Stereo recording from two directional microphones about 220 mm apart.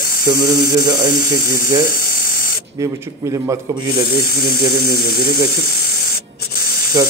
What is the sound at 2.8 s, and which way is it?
A man's voice, 10° right (ahead or behind).